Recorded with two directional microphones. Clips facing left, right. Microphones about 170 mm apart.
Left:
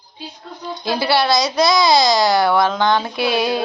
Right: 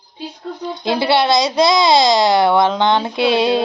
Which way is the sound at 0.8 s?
25° right (ahead or behind).